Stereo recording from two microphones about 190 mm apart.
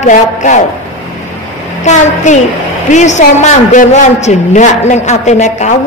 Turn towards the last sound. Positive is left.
turn(degrees=40)  # may be behind; listen again after turning